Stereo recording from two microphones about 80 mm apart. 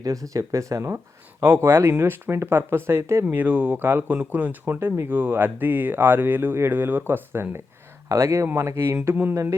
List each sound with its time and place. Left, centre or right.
0.0 s speech: right
1.5 s speech: right
3.2 s speech: centre
8.1 s speech: right
9.0 s speech: right
9.3 s speech: right